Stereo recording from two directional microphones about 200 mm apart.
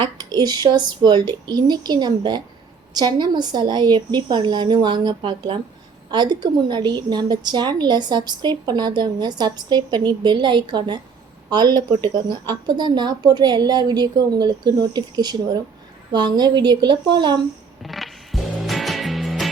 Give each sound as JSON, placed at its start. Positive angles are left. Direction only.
{"t": 0.0, "sound": "a woman's voice", "side_deg": -20}
{"t": 17.8, "sound": "music", "side_deg": 0}